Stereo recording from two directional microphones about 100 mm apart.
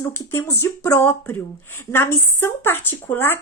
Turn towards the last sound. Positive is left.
turn(degrees=20)  # may be behind; listen again after turning